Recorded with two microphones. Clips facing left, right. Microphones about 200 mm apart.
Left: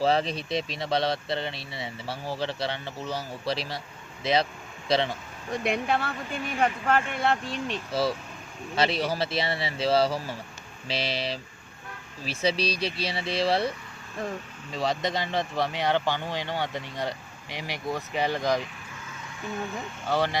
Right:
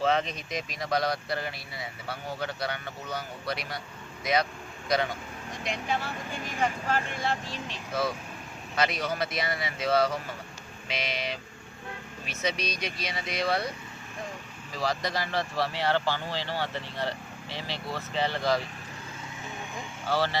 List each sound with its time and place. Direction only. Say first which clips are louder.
0.0 s speech: left 3 dB; 35° left (ahead or behind)
5.6 s speech: left 4 dB; 60° left (ahead or behind)
8.7 s speech: left 3 dB; 30° left (ahead or behind)
20.1 s speech: left 2 dB; 15° left (ahead or behind)